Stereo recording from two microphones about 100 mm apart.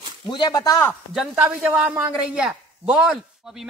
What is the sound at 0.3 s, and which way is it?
Speech, 45° left (ahead or behind).